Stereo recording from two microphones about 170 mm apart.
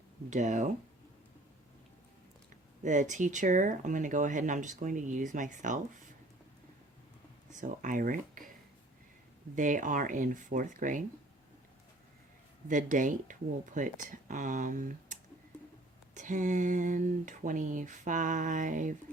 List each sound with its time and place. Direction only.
0.3 s speech: 45° right (ahead or behind)
2.8 s speech: 45° right (ahead or behind)
7.5 s speech: 50° right (ahead or behind)
9.6 s speech: 50° right (ahead or behind)
12.6 s speech: 50° right (ahead or behind)